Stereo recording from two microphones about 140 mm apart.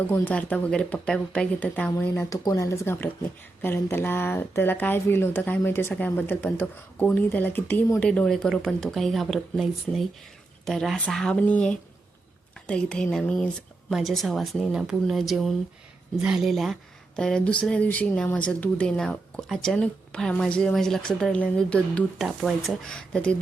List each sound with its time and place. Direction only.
0.1 s speech: 10° left (ahead or behind)
2.3 s speech: 25° left (ahead or behind); by 23.3 s 5° left (ahead or behind)